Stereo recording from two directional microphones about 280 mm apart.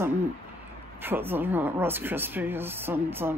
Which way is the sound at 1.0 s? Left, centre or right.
Centre.